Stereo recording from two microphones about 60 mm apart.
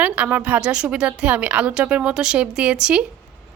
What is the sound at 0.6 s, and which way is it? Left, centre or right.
A woman's voice, centre.